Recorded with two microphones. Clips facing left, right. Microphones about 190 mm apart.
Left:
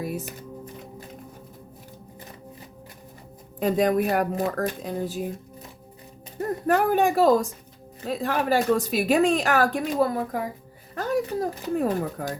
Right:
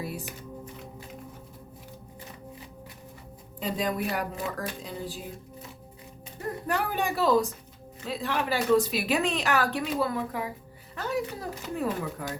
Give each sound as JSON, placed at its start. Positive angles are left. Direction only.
{"t": 0.3, "sound": "music", "side_deg": 45}
{"t": 3.6, "sound": "a woman's voice", "side_deg": 50}
{"t": 6.7, "sound": "a woman's voice", "side_deg": 50}